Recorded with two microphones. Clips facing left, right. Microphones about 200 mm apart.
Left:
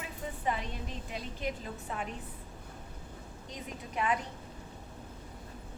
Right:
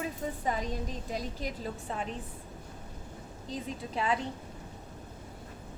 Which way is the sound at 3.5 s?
30° right (ahead or behind).